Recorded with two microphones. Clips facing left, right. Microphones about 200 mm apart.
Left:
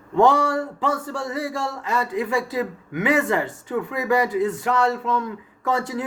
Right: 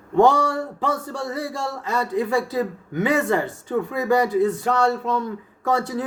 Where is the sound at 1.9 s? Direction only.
35° right (ahead or behind).